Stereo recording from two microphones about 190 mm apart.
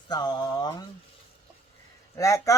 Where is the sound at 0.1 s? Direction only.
20° left (ahead or behind).